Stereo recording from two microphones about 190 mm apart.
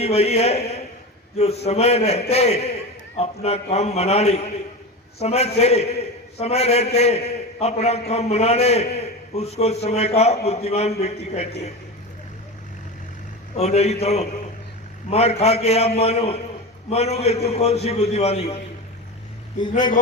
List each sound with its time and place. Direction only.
0.0 s a man's voice: 35° left (ahead or behind)
13.6 s a man's voice: 35° left (ahead or behind)